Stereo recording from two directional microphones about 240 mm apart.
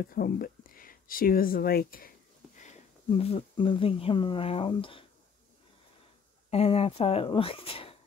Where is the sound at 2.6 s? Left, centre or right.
Left.